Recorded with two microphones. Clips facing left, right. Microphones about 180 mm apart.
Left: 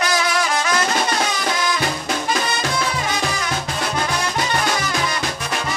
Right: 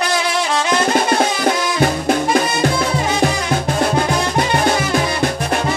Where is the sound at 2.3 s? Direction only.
50° right (ahead or behind).